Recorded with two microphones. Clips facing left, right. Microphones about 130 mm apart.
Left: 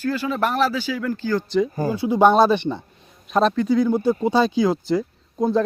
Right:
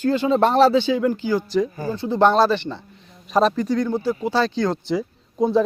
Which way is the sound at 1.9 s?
10° left (ahead or behind).